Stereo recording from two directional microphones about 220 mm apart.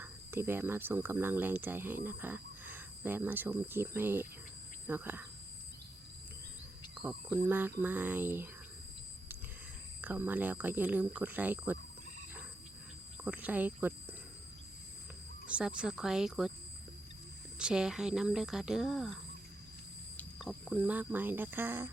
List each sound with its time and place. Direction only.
0.0 s speech: 10° right (ahead or behind)
6.9 s speech: 5° right (ahead or behind)
10.0 s speech: 10° right (ahead or behind)
13.2 s speech: 5° right (ahead or behind)
15.4 s speech: 5° right (ahead or behind)
17.6 s speech: 5° right (ahead or behind)
20.1 s speech: centre (ahead or behind)